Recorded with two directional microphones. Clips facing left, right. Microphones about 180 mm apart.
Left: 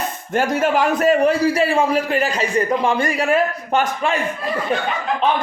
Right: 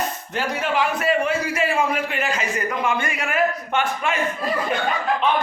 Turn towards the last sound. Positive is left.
turn(degrees=35)  # may be behind; listen again after turning